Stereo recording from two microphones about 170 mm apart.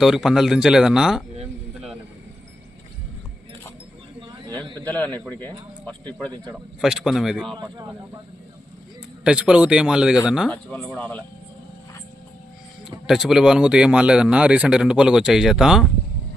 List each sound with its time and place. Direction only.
0.0 s speech: centre (ahead or behind)
4.4 s a sound: 25° right (ahead or behind)
5.8 s speech: 10° left (ahead or behind)
6.5 s speech: 5° right (ahead or behind)
7.5 s speech: 25° right (ahead or behind)
9.2 s speech: 5° right (ahead or behind)
13.1 s speech: centre (ahead or behind)